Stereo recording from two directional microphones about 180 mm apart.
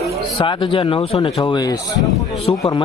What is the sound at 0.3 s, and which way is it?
Speech, 30° left (ahead or behind).